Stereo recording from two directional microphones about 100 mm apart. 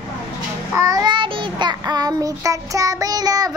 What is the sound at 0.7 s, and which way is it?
Child singing, 40° right (ahead or behind).